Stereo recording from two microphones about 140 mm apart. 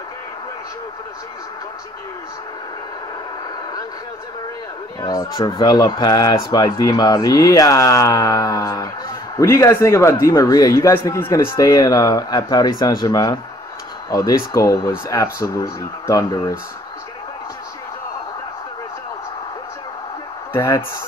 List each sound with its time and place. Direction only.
5.0 s speech: 25° left (ahead or behind)
20.5 s speech: 20° left (ahead or behind)